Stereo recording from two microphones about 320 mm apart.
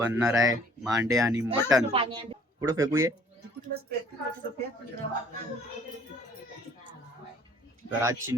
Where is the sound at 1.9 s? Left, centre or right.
Centre.